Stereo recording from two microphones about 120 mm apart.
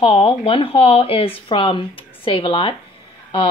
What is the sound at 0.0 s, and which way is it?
A woman's voice, 50° left (ahead or behind).